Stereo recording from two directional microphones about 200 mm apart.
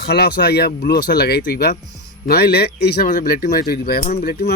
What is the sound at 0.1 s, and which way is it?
Speech, 55° left (ahead or behind).